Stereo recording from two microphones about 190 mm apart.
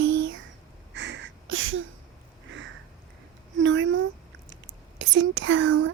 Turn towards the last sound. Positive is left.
turn(degrees=-85)